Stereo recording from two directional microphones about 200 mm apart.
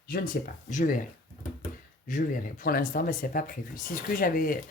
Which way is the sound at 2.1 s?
40° left (ahead or behind).